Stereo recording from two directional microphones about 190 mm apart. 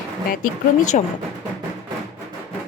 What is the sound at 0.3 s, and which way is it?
Speech, 40° left (ahead or behind).